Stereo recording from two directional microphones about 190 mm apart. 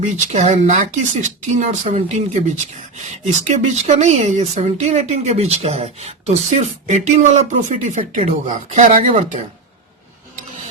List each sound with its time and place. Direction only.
0.0 s a woman's voice: 35° right (ahead or behind)